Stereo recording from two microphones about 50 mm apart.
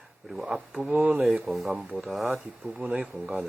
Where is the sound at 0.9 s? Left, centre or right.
Right.